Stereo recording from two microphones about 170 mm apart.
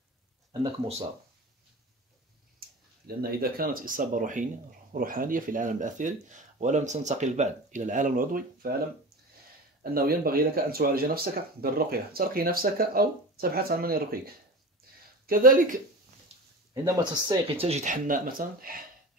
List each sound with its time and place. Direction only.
0.5 s speech: 35° right (ahead or behind)
2.6 s a sound: 60° right (ahead or behind)
3.2 s speech: 60° right (ahead or behind)
9.9 s speech: 60° right (ahead or behind)
15.2 s speech: 55° right (ahead or behind)
16.3 s a sound: 40° right (ahead or behind)
16.7 s speech: 20° right (ahead or behind)
17.6 s speech: 40° right (ahead or behind); by 18.8 s 55° right (ahead or behind)